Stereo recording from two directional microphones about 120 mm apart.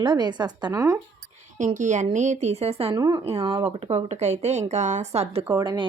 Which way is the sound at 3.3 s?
45° right (ahead or behind).